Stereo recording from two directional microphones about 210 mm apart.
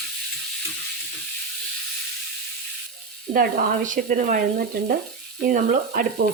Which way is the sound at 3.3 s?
40° right (ahead or behind).